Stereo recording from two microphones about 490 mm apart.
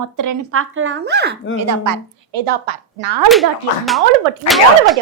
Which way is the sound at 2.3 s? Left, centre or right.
Right.